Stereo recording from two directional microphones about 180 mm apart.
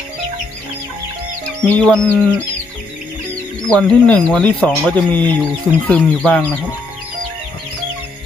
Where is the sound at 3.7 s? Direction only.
5° left (ahead or behind).